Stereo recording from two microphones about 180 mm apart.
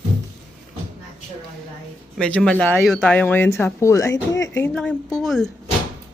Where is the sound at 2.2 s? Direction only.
5° left (ahead or behind).